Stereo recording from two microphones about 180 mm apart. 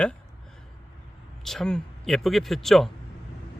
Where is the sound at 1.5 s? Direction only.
5° left (ahead or behind).